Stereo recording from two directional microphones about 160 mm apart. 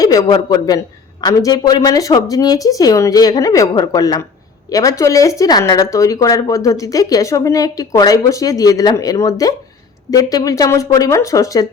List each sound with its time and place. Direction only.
0.0 s a woman's voice: 25° left (ahead or behind)